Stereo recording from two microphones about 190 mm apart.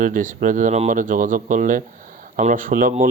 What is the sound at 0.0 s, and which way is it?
Speech, 45° right (ahead or behind).